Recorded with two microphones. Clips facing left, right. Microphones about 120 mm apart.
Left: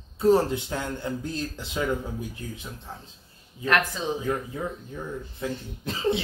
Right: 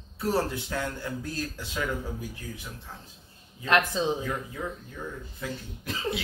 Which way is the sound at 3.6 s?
20° right (ahead or behind).